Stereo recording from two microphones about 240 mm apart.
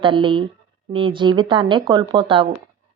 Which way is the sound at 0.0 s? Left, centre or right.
Right.